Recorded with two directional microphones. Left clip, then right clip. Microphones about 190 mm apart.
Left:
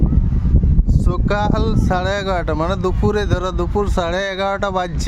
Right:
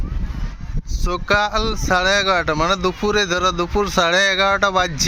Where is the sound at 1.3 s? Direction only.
15° left (ahead or behind).